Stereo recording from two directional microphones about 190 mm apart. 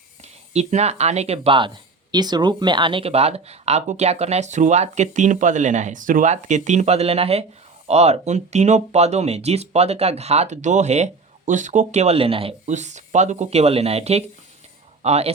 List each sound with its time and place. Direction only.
0.2 s speech: 35° right (ahead or behind)